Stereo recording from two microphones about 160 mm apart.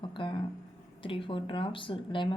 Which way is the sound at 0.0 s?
30° left (ahead or behind).